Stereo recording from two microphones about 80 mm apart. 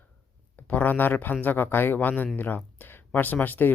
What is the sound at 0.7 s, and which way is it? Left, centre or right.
Speech, left.